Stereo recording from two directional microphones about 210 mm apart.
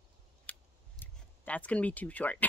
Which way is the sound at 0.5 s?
5° left (ahead or behind).